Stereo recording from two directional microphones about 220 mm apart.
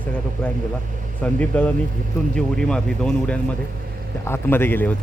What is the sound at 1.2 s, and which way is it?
Speech, 5° left (ahead or behind).